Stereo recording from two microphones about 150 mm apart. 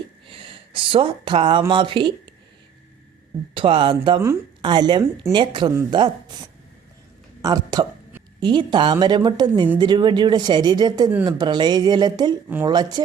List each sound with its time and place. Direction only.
0.3 s a woman's voice: 35° right (ahead or behind)
3.5 s a woman's voice: 35° right (ahead or behind)
7.4 s a woman's voice: 25° right (ahead or behind)